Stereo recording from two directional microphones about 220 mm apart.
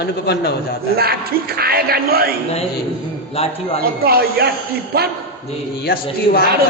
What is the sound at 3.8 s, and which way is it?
Speech, 45° right (ahead or behind).